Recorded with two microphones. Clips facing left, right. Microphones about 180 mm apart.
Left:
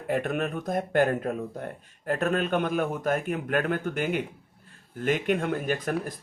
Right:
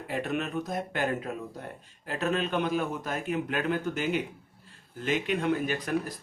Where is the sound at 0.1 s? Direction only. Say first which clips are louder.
Left 4 dB; 50° left (ahead or behind).